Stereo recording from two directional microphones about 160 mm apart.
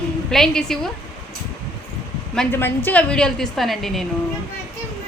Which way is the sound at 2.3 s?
15° left (ahead or behind).